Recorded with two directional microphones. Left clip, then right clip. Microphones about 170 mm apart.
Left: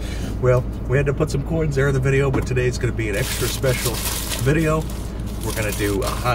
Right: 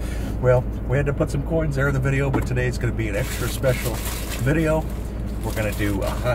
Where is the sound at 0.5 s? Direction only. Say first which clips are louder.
Even; 20° right (ahead or behind).